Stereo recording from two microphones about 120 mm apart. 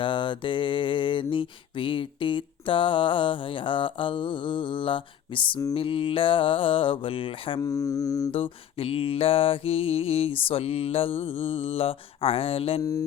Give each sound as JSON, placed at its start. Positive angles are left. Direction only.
{"t": 0.0, "sound": "mantra", "side_deg": 40}
{"t": 7.6, "sound": "speech", "side_deg": 30}
{"t": 8.3, "sound": "mantra", "side_deg": 50}
{"t": 12.8, "sound": "speech", "side_deg": 30}